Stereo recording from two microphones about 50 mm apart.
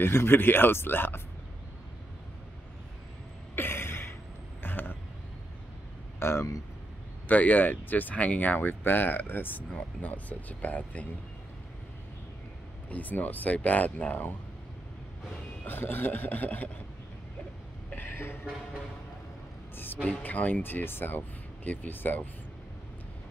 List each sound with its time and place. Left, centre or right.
0.0 s speech: left
3.5 s a sound: left
4.6 s vehicle: left
6.1 s speech: left
7.2 s speech: left
8.5 s speech: left
12.9 s speech: left
15.6 s speech: left
17.9 s a sound: left
19.8 s speech: left